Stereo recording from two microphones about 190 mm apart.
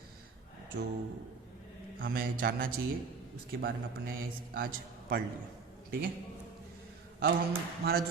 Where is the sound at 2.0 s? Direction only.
50° right (ahead or behind).